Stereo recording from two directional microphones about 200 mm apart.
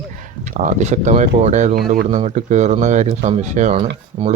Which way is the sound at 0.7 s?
35° right (ahead or behind).